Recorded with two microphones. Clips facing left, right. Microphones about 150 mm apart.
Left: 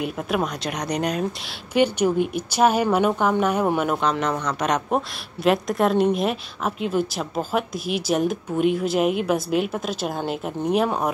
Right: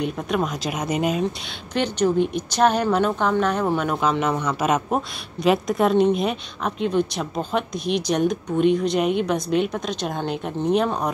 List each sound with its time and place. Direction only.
0.0 s a woman's voice: 5° left (ahead or behind)
1.7 s a woman's voice: 10° left (ahead or behind)
4.0 s a woman's voice: 5° right (ahead or behind)